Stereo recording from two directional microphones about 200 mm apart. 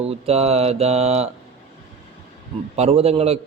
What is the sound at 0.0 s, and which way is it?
A man's voice, 30° right (ahead or behind).